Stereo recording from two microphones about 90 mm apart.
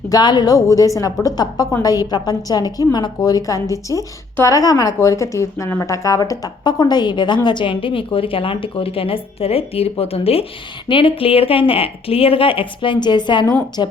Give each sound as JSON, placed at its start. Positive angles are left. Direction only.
{"t": 0.1, "sound": "a woman's voice", "side_deg": 50}
{"t": 10.8, "sound": "a woman's voice", "side_deg": 75}